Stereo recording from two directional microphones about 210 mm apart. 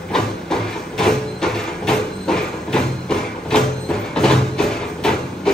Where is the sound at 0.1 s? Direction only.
5° left (ahead or behind).